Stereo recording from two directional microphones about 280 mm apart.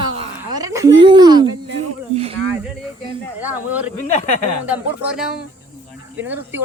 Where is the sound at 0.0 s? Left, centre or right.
Centre.